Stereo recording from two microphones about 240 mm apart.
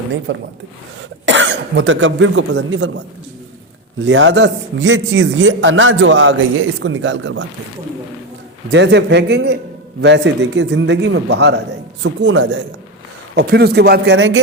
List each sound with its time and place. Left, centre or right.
0.3 s a man's voice: right
4.0 s a man's voice: right
8.7 s a man's voice: right